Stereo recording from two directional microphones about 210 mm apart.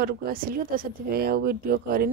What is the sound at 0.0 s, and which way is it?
Speech, 45° right (ahead or behind).